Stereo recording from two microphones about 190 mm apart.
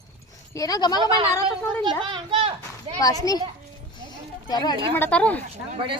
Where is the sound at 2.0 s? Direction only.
25° right (ahead or behind).